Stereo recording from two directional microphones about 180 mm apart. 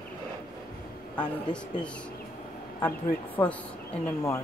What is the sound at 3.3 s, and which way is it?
Speech, 5° left (ahead or behind).